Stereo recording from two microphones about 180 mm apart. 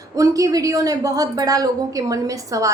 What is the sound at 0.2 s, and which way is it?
A woman's voice, 20° right (ahead or behind).